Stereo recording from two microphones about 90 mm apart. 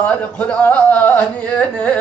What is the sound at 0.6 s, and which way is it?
Music, 15° left (ahead or behind).